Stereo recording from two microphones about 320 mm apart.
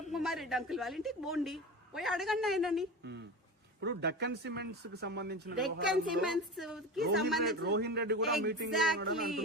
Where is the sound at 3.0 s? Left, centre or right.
Right.